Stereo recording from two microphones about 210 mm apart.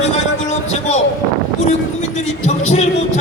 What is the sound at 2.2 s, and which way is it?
A man's voice, 35° left (ahead or behind).